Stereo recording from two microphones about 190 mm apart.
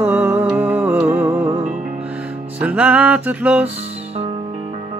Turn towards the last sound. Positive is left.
turn(degrees=-10)  # may be behind; listen again after turning